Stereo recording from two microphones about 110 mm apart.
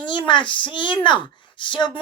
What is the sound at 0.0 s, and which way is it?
Speech, 45° left (ahead or behind).